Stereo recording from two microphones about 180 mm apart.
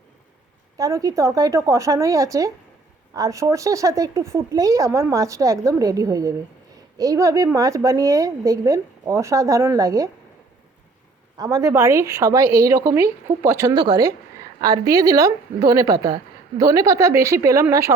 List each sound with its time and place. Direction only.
0.8 s a woman's voice: 20° right (ahead or behind)
11.3 s speech: 20° right (ahead or behind)